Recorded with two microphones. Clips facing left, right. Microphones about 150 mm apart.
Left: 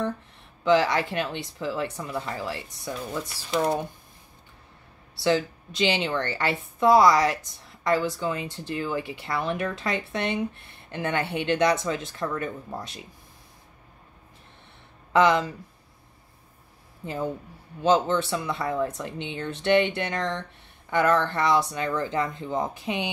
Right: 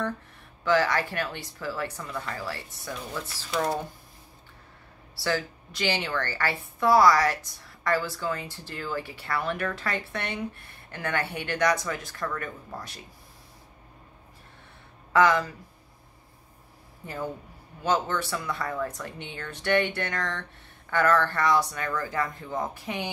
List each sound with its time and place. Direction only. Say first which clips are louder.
0.7 s a woman's voice: left 3 dB; 20° left (ahead or behind)
5.1 s a woman's voice: left 5 dB; 20° left (ahead or behind)
15.1 s a woman's voice: left 2 dB; 20° left (ahead or behind)
17.0 s a woman's voice: left 4 dB; 20° left (ahead or behind)